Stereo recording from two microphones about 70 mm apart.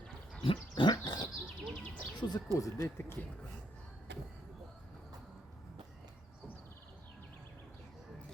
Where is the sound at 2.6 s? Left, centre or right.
Left.